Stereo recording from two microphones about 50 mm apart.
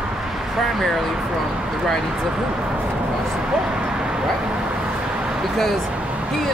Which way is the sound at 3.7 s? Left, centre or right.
Centre.